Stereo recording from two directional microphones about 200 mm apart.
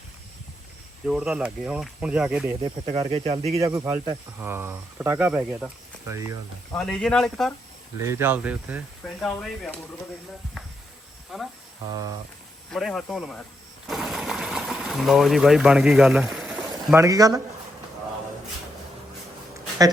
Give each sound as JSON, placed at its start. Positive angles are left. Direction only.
{"t": 1.0, "sound": "speech", "side_deg": -5}
{"t": 3.1, "sound": "speech", "side_deg": -30}
{"t": 3.6, "sound": "speech", "side_deg": -15}
{"t": 6.7, "sound": "speech", "side_deg": 5}
{"t": 8.0, "sound": "speech", "side_deg": -10}
{"t": 9.0, "sound": "speech", "side_deg": 5}
{"t": 11.3, "sound": "speech", "side_deg": 0}
{"t": 12.7, "sound": "speech", "side_deg": 0}
{"t": 13.8, "sound": "sewing machine", "side_deg": 0}
{"t": 16.7, "sound": "speech", "side_deg": -15}